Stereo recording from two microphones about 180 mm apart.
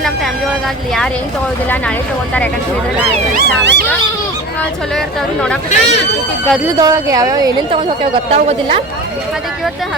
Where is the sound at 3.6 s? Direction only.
75° right (ahead or behind).